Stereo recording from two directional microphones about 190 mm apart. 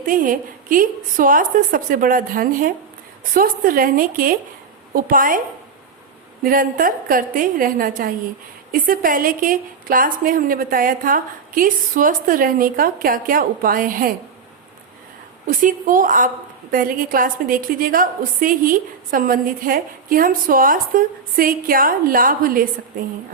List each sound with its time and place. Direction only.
0.0 s a woman's voice: 45° right (ahead or behind)
6.4 s a woman's voice: 50° right (ahead or behind)
15.6 s a woman's voice: 45° right (ahead or behind)